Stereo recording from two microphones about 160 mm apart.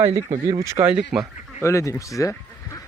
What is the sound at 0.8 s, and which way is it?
Speech, 5° right (ahead or behind).